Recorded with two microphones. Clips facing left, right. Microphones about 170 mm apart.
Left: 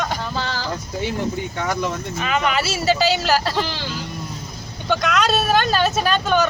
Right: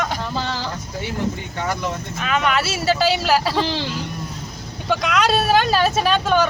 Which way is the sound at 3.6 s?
20° right (ahead or behind).